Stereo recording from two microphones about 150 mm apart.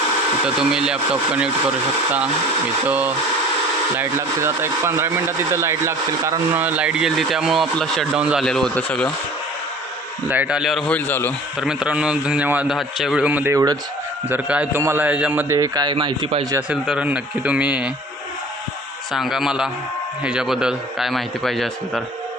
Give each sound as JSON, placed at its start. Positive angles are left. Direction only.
{"t": 0.4, "sound": "a man's voice", "side_deg": -5}
{"t": 2.8, "sound": "speech", "side_deg": -10}
{"t": 4.4, "sound": "a man's voice", "side_deg": -15}
{"t": 10.2, "sound": "a man's voice", "side_deg": -10}
{"t": 10.9, "sound": "speech", "side_deg": 15}
{"t": 11.6, "sound": "speech", "side_deg": -5}
{"t": 14.3, "sound": "speech", "side_deg": -10}
{"t": 15.5, "sound": "speech", "side_deg": -25}
{"t": 16.6, "sound": "speech", "side_deg": -5}
{"t": 19.1, "sound": "a man's voice", "side_deg": 0}